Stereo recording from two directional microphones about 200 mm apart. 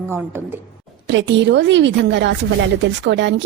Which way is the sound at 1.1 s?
65° right (ahead or behind).